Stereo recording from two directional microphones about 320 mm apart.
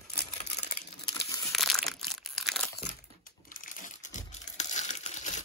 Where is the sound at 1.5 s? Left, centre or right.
Centre.